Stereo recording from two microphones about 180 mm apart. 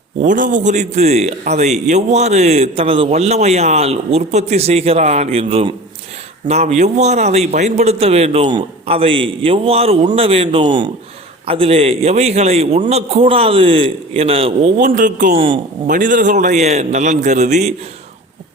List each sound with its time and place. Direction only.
0.2 s a man's voice: 45° right (ahead or behind)
14.8 s a man's voice: 45° right (ahead or behind)
15.4 s speech: 30° right (ahead or behind)
15.9 s a man's voice: 45° right (ahead or behind)